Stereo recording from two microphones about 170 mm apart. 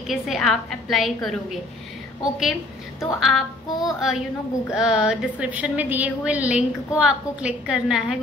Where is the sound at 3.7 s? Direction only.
20° left (ahead or behind).